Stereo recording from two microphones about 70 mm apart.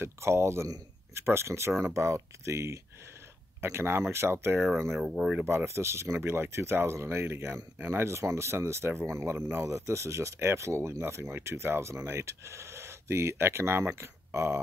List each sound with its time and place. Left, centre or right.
0.0 s speech: right
4.8 s speech: centre
5.4 s speech: right